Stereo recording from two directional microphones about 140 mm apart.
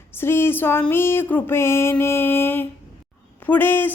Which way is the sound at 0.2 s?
15° left (ahead or behind).